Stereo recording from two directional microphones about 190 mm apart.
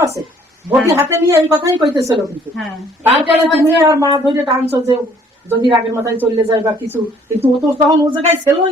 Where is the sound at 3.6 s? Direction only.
10° right (ahead or behind).